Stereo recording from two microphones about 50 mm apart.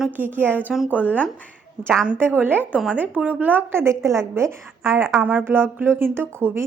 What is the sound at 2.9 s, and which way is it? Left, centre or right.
Speech, right.